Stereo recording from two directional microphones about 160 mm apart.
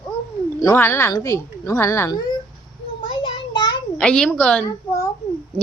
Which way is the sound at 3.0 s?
30° left (ahead or behind).